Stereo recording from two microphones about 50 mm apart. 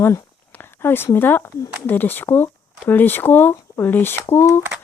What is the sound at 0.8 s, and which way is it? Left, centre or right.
Speech, left.